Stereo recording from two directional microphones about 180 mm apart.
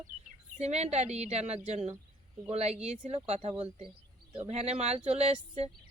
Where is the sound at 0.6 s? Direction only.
35° right (ahead or behind).